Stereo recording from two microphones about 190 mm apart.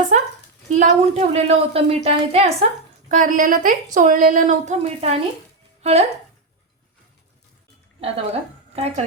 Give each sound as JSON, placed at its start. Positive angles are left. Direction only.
{"t": 0.7, "sound": "a woman's voice", "side_deg": -40}
{"t": 3.1, "sound": "a woman's voice", "side_deg": -45}
{"t": 8.0, "sound": "speech", "side_deg": -30}